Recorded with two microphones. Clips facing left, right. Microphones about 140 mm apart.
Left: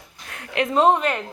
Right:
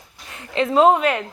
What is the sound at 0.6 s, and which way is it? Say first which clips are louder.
Speech: right 3 dB; 5° right (ahead or behind).